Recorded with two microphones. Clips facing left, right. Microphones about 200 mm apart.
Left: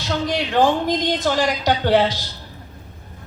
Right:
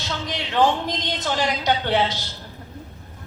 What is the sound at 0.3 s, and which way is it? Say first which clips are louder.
Speech: left 2 dB; 50° left (ahead or behind).